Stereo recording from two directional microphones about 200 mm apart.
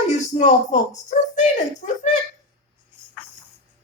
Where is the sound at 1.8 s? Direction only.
40° left (ahead or behind).